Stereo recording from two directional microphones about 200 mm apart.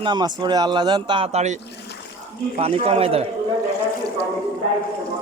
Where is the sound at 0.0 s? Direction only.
20° right (ahead or behind).